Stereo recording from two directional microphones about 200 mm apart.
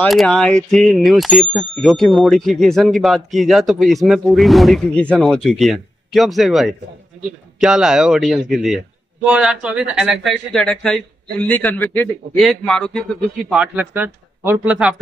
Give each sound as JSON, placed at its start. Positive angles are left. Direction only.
{"t": 0.0, "sound": "speech", "side_deg": 5}